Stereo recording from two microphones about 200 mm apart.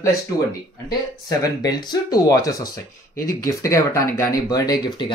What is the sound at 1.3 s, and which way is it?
Speech, 15° left (ahead or behind).